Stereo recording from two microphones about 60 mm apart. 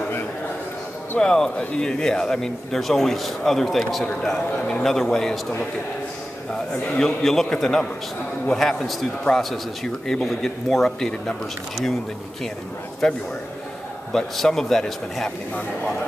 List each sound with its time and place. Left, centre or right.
1.2 s a man's voice: centre
4.0 s a man's voice: centre
6.5 s a man's voice: centre
13.0 s a man's voice: centre